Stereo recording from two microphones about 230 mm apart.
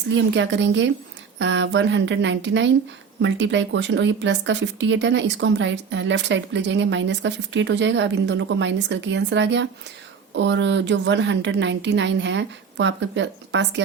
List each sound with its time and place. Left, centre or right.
0.1 s speech: right